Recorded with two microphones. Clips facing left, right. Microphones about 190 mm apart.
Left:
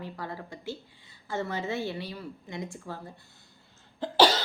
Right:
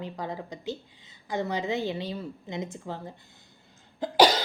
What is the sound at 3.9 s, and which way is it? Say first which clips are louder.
Cough: right 2 dB; 15° right (ahead or behind).